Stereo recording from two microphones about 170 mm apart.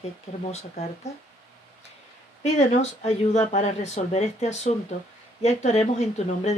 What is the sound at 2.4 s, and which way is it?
Speech, 40° left (ahead or behind).